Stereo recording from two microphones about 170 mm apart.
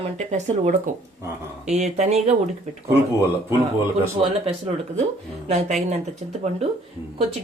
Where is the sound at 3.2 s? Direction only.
15° right (ahead or behind).